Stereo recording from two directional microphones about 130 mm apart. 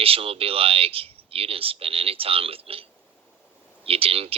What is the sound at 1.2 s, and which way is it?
Speech, 45° right (ahead or behind).